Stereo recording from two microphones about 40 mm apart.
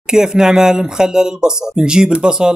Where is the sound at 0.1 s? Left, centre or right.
Centre.